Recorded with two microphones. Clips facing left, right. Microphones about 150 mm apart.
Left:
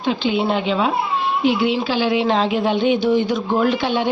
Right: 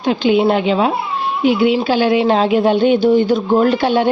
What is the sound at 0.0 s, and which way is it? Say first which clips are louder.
Speech: right 5 dB; 55° right (ahead or behind).